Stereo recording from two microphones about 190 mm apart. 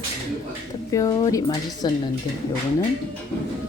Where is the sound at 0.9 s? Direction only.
20° left (ahead or behind).